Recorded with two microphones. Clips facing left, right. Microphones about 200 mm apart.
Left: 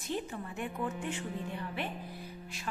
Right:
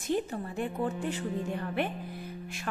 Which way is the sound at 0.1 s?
35° right (ahead or behind).